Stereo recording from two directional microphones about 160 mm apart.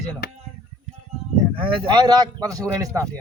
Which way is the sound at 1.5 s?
30° right (ahead or behind).